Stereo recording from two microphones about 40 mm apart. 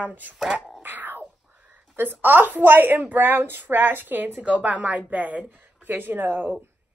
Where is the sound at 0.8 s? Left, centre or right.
Right.